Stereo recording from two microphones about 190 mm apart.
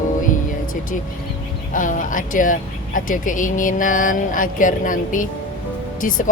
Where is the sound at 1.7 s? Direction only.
45° left (ahead or behind).